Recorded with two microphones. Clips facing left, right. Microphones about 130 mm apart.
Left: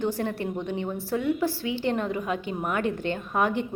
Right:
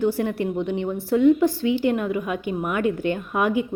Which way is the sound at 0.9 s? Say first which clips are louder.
Right 14 dB; 10° left (ahead or behind).